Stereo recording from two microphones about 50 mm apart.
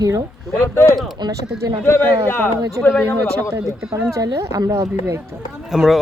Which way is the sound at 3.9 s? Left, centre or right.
Right.